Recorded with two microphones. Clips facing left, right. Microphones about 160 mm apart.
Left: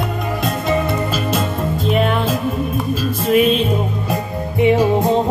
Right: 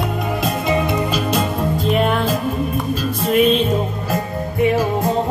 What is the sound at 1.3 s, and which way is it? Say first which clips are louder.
Music: right 1 dB; centre (ahead or behind).